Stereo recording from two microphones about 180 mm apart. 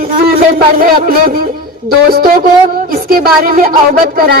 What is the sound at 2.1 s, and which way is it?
A woman's voice, 55° right (ahead or behind).